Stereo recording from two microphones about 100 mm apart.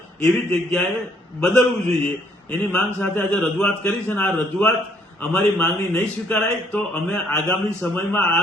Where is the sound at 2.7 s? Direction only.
10° left (ahead or behind).